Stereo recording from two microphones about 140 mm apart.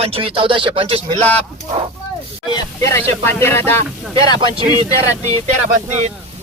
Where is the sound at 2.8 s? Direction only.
20° left (ahead or behind).